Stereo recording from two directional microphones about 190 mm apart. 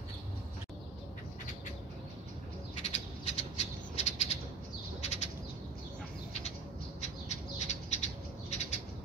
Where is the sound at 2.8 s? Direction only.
35° left (ahead or behind).